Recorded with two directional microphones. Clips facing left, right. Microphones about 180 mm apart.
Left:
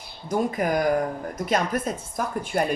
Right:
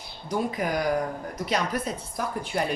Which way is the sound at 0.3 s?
50° left (ahead or behind).